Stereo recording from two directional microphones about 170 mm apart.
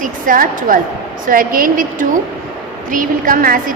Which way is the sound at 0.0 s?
55° right (ahead or behind).